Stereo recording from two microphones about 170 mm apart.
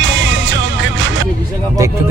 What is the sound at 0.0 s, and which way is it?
Music, 90° right.